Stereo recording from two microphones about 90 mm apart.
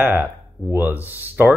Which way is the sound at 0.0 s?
25° right (ahead or behind).